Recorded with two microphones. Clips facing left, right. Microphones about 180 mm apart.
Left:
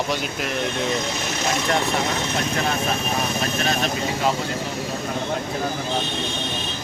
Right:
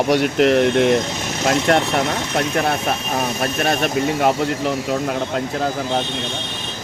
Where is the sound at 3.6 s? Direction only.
55° right (ahead or behind).